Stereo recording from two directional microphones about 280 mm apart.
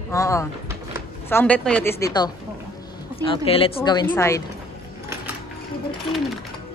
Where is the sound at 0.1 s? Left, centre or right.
Centre.